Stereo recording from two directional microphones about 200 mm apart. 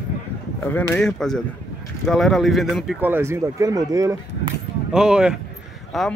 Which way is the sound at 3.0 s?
10° right (ahead or behind).